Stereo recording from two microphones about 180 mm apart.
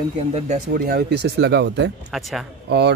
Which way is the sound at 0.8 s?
60° right (ahead or behind).